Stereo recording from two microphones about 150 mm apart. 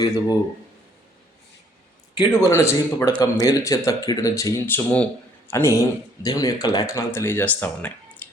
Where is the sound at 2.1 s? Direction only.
20° left (ahead or behind).